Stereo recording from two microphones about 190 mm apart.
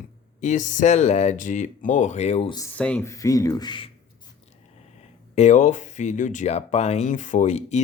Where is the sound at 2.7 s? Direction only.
5° left (ahead or behind); by 3.8 s 25° left (ahead or behind).